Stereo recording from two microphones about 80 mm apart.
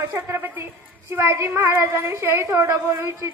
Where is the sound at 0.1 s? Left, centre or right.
Right.